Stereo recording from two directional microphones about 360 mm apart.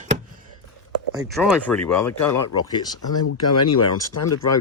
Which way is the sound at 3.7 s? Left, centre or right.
Left.